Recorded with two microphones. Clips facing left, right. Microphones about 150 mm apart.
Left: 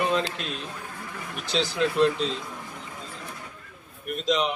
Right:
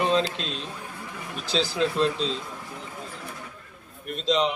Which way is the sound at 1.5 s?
30° right (ahead or behind).